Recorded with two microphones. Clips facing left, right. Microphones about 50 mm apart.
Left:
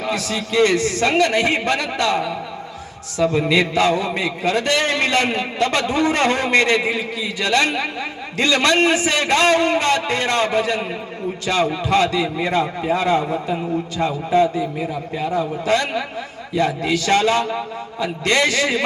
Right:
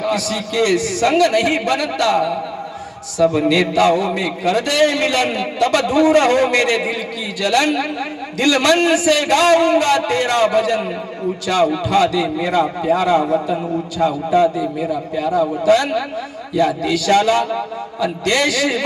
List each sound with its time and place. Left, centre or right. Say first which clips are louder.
0.0 s a man's voice: right 3 dB; left
3.3 s a man's voice: right 2 dB; left
16.9 s a man's voice: right 2 dB; left